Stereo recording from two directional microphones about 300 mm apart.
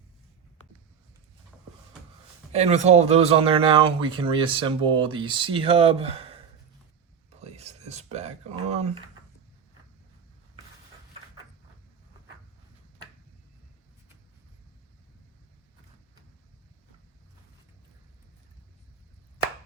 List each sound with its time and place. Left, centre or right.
2.5 s speech: right
7.4 s whispering: right